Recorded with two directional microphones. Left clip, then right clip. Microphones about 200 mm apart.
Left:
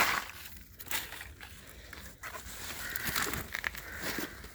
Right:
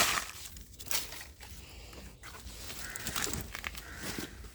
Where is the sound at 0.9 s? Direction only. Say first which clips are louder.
Even; 60° right (ahead or behind).